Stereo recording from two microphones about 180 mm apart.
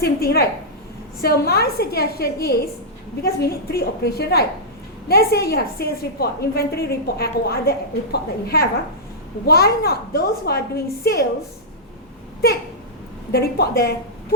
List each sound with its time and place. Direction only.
0.0 s a woman's voice: 60° left (ahead or behind)
13.3 s a woman's voice: 60° left (ahead or behind)